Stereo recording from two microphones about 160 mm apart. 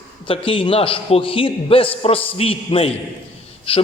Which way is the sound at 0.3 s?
35° left (ahead or behind).